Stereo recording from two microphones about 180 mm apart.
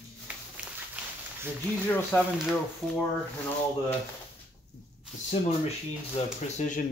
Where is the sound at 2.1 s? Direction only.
10° left (ahead or behind).